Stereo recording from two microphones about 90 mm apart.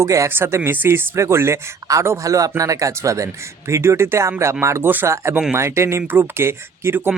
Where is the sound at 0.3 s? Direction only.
25° right (ahead or behind).